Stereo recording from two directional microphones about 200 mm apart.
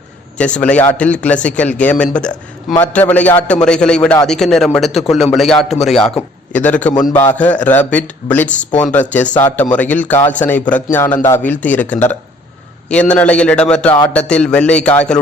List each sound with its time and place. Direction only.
0.3 s a man's voice: 5° left (ahead or behind)
6.9 s a man's voice: 20° left (ahead or behind)
7.3 s a man's voice: 5° left (ahead or behind)